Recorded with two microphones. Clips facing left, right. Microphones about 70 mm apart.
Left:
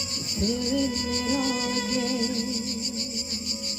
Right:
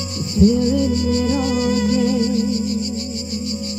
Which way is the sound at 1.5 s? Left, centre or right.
Centre.